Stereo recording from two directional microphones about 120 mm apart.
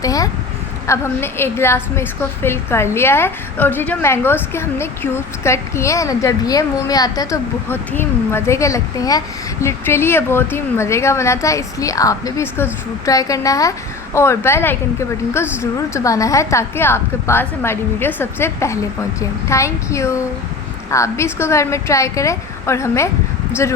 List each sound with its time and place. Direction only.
0.0 s speech: 30° left (ahead or behind)
7.7 s speech: 20° left (ahead or behind)
15.9 s speech: 25° left (ahead or behind)